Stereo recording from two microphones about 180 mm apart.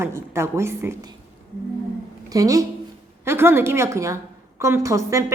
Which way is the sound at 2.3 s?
20° right (ahead or behind).